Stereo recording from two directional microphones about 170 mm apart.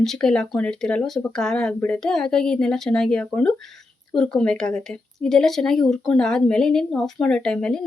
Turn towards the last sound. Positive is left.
turn(degrees=5)  # may be behind; listen again after turning